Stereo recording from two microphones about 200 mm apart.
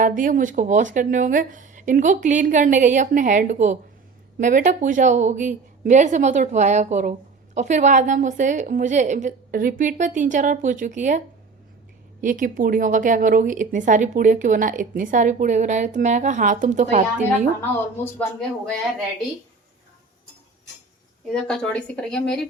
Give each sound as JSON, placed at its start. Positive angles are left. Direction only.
{"t": 0.0, "sound": "a woman's voice", "side_deg": -40}
{"t": 12.2, "sound": "a woman's voice", "side_deg": -40}
{"t": 17.6, "sound": "speech", "side_deg": 10}
{"t": 21.4, "sound": "speech", "side_deg": 5}